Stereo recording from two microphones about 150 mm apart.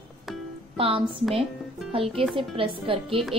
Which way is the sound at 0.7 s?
35° right (ahead or behind).